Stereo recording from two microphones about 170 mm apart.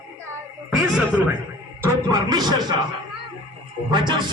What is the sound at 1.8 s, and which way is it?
Speech, 20° right (ahead or behind).